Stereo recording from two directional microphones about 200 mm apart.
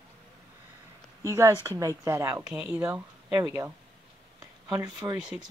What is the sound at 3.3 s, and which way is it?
Speech, 15° right (ahead or behind).